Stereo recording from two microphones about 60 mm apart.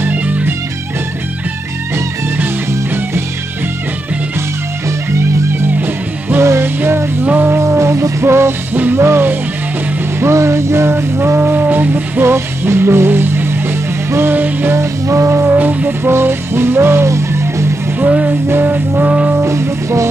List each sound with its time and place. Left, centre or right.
0.0 s music: right
5.1 s music: right
5.5 s music: right
6.4 s music: right
7.6 s music: right
10.2 s music: right
12.2 s music: right
14.7 s music: right
15.5 s music: right
16.1 s music: right
18.0 s music: right
19.3 s music: right